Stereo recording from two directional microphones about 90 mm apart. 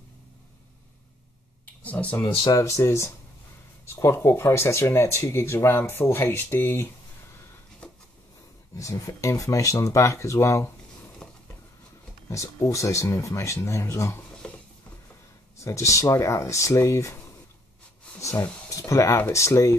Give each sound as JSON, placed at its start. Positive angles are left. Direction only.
{"t": 1.8, "sound": "speech", "side_deg": 15}
{"t": 2.5, "sound": "speech", "side_deg": 35}
{"t": 7.8, "sound": "a sound", "side_deg": 10}
{"t": 8.7, "sound": "speech", "side_deg": 35}
{"t": 11.2, "sound": "a sound", "side_deg": 10}
{"t": 12.3, "sound": "speech", "side_deg": 35}
{"t": 14.4, "sound": "patter", "side_deg": 10}
{"t": 15.6, "sound": "speech", "side_deg": 35}
{"t": 18.3, "sound": "speech", "side_deg": 35}